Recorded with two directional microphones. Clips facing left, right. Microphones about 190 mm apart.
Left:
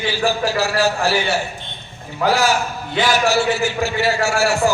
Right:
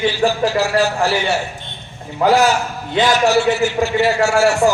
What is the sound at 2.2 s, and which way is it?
A man's voice, 20° right (ahead or behind).